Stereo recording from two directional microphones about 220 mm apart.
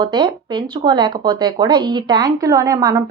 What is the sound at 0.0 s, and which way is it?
Speech, 20° right (ahead or behind).